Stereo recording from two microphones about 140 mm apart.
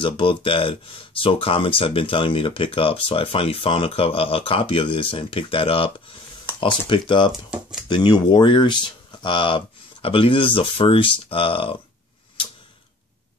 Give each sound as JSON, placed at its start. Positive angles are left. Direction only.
{"t": 0.0, "sound": "speech", "side_deg": 40}